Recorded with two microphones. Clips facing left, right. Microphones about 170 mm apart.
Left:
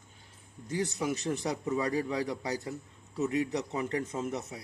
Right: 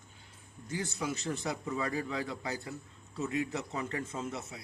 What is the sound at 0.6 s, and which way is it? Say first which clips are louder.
A man's voice: left 4 dB; 20° left (ahead or behind).